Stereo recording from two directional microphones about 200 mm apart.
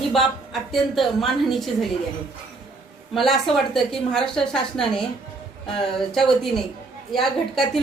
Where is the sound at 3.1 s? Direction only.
Centre (ahead or behind).